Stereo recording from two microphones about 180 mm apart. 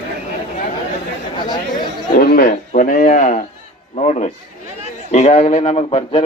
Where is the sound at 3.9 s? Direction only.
40° left (ahead or behind).